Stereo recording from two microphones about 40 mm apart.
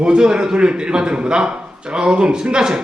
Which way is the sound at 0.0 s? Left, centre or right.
Right.